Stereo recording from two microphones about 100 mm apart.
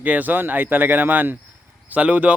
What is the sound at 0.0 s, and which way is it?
Speech, 15° right (ahead or behind).